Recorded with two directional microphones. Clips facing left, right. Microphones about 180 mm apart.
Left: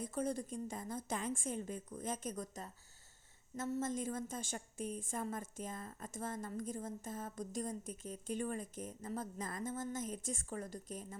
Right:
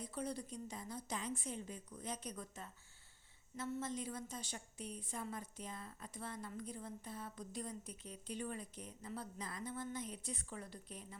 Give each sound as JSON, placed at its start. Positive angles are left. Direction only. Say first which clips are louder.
{"t": 0.0, "sound": "a woman's voice", "louder": "left 5 dB", "side_deg": 45}